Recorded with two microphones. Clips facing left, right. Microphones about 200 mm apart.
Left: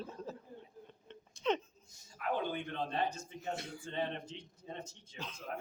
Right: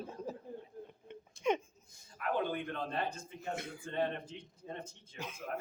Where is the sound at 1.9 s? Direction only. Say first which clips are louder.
Right 1 dB; 55° right (ahead or behind).